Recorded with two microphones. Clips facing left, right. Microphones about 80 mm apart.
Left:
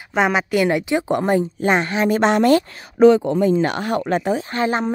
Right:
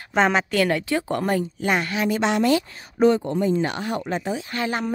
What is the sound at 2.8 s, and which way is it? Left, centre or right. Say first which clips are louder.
Speech: left 6 dB; left.